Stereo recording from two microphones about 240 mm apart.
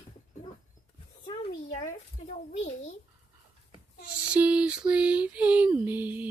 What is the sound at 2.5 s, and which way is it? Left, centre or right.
Speech, left.